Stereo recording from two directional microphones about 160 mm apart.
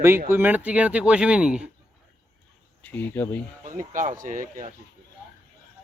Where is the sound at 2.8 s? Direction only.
10° left (ahead or behind).